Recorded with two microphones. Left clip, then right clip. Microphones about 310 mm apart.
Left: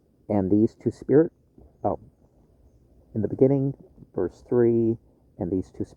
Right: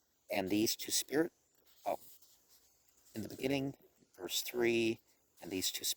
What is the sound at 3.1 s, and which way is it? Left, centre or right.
Speech, right.